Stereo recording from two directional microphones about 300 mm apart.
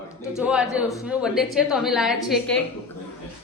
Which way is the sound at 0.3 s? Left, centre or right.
Centre.